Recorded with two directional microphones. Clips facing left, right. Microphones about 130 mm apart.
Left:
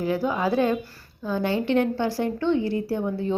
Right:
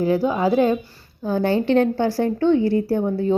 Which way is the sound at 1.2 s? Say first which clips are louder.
Right 5 dB; 40° right (ahead or behind).